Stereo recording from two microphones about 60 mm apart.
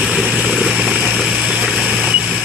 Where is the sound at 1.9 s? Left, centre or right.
Centre.